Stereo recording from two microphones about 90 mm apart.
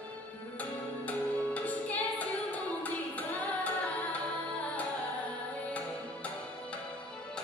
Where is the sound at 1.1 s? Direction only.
15° left (ahead or behind).